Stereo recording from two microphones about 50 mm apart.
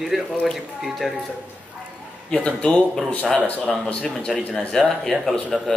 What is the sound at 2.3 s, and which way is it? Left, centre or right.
Speech, left.